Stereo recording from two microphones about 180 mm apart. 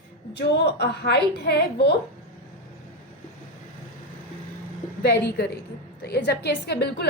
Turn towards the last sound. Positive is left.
turn(degrees=65)  # may be behind; listen again after turning